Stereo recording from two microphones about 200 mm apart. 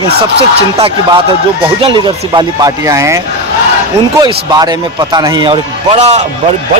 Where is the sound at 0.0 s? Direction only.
30° right (ahead or behind).